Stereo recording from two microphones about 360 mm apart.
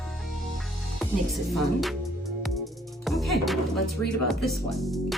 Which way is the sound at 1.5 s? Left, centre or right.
Centre.